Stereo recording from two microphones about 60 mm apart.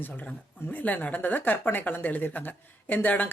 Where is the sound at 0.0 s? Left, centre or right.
Left.